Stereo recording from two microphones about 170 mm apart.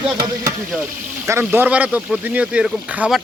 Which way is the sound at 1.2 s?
15° right (ahead or behind).